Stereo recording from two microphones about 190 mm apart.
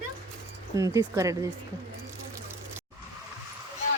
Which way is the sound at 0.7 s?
15° right (ahead or behind).